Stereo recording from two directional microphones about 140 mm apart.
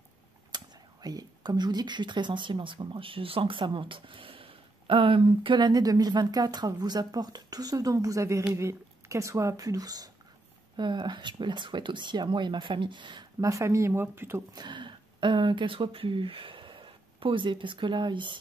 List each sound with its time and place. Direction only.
0.5 s a sound: 30° right (ahead or behind)
1.0 s speech: 25° right (ahead or behind)
14.5 s speech: 30° right (ahead or behind)